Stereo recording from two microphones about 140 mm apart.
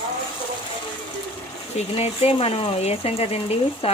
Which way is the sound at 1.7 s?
45° left (ahead or behind).